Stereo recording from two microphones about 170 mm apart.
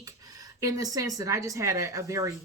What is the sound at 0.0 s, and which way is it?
A woman's voice, 20° right (ahead or behind).